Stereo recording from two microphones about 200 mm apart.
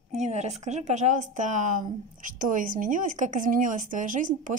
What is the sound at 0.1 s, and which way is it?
Speech, 35° right (ahead or behind).